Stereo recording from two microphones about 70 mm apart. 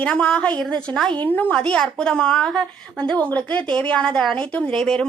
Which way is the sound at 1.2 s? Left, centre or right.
Left.